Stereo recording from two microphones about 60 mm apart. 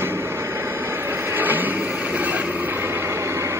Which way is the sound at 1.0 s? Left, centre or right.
Right.